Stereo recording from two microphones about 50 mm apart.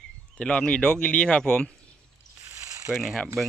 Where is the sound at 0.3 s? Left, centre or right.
Centre.